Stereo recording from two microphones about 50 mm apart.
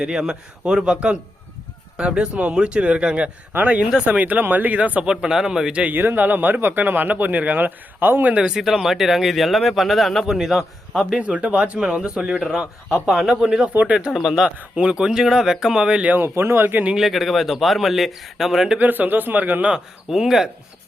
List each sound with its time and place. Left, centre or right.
0.0 s a man's voice: centre
5.2 s a man's voice: centre
5.9 s speech: right
8.3 s speech: right
8.5 s a man's voice: centre
11.2 s a man's voice: right; by 14.4 s centre
14.4 s a man's voice: centre
16.0 s speech: right
16.2 s a man's voice: right
17.0 s speech: centre
18.8 s speech: right
20.1 s a man's voice: centre